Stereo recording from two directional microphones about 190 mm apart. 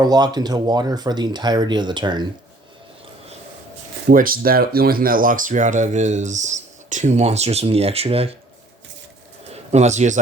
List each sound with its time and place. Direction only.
0.0 s speech: 20° right (ahead or behind)
4.1 s speech: 50° right (ahead or behind); by 8.4 s 30° right (ahead or behind)
9.5 s speech: 35° right (ahead or behind)